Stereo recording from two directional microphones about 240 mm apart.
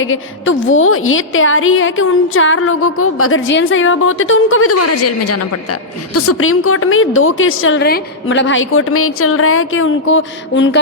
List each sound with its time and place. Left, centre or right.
0.0 s a woman's voice: left
6.1 s a woman's voice: left